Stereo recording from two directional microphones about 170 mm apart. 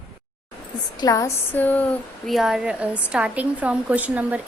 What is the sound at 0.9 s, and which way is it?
A woman's voice, 20° left (ahead or behind).